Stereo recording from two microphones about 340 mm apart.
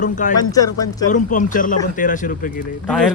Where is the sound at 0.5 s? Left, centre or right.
Centre.